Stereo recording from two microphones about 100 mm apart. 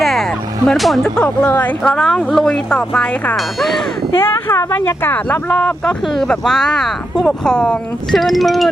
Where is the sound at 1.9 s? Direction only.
5° left (ahead or behind).